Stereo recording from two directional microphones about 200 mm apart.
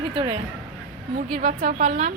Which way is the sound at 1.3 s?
40° right (ahead or behind).